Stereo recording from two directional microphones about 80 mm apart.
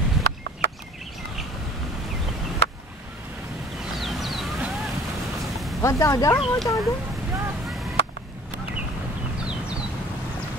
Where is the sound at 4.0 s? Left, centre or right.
Centre.